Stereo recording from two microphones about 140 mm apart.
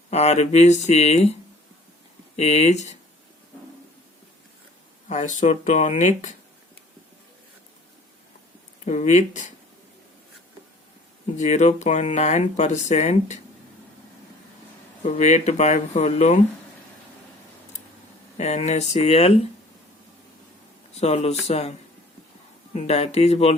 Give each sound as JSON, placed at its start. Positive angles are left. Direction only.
{"t": 0.1, "sound": "speech", "side_deg": 50}
{"t": 5.0, "sound": "speech", "side_deg": 60}
{"t": 8.8, "sound": "speech", "side_deg": 55}
{"t": 11.3, "sound": "speech", "side_deg": 55}
{"t": 15.0, "sound": "speech", "side_deg": 55}
{"t": 18.3, "sound": "speech", "side_deg": 55}
{"t": 20.9, "sound": "speech", "side_deg": 50}